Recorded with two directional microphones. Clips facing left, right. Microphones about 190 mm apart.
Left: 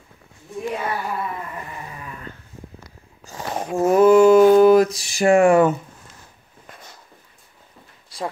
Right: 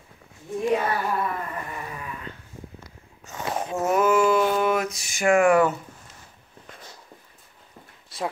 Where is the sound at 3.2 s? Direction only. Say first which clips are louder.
Left 1 dB; 30° left (ahead or behind).